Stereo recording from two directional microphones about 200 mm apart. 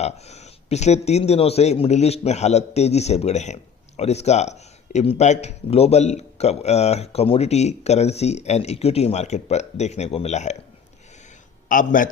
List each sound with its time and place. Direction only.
0.0 s speech: 35° left (ahead or behind)
11.7 s speech: 40° left (ahead or behind)